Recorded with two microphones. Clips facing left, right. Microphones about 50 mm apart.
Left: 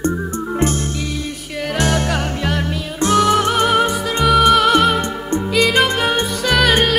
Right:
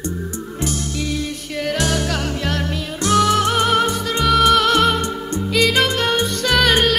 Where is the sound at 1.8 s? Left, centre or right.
Left.